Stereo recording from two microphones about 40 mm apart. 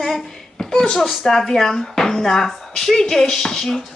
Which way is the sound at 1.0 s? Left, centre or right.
Centre.